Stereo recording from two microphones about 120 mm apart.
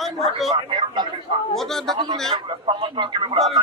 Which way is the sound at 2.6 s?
45° right (ahead or behind).